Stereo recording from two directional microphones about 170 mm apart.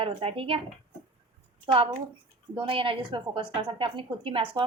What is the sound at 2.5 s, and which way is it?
A woman's voice, 30° right (ahead or behind).